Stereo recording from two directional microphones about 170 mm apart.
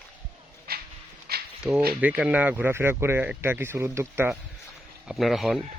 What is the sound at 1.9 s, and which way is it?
Speech, 10° right (ahead or behind).